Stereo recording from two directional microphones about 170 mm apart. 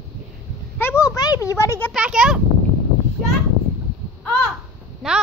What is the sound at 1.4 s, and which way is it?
Speech, 15° left (ahead or behind).